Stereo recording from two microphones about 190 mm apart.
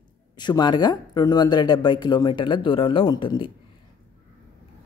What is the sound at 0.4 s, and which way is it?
Speech, 25° left (ahead or behind).